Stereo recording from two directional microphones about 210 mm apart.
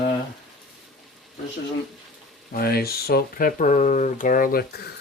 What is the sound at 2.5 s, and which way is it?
Speech, 45° left (ahead or behind).